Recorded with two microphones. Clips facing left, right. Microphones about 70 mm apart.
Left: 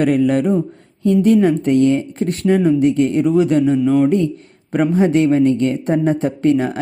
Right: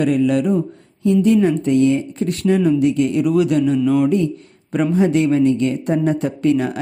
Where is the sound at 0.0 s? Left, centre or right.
Left.